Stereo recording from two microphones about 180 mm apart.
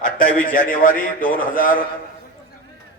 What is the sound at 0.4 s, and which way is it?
A man's voice, 45° left (ahead or behind).